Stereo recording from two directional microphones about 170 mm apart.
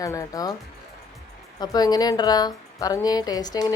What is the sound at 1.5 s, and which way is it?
A woman's voice, 20° left (ahead or behind).